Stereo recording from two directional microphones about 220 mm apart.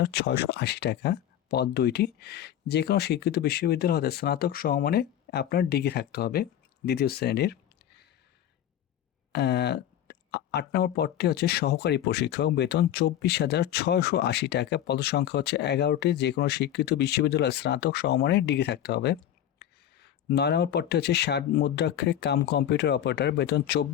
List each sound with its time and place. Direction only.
0.0 s speech: 50° left (ahead or behind)
9.3 s speech: 50° left (ahead or behind)